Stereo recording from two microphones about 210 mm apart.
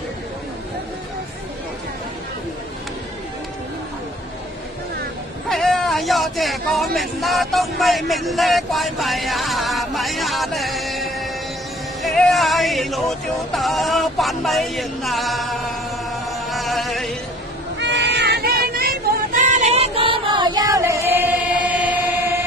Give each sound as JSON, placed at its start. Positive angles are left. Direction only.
{"t": 5.5, "sound": "speech", "side_deg": 0}
{"t": 12.0, "sound": "music", "side_deg": 0}
{"t": 13.5, "sound": "speech", "side_deg": 0}
{"t": 16.3, "sound": "music", "side_deg": 0}
{"t": 17.7, "sound": "a sound", "side_deg": -55}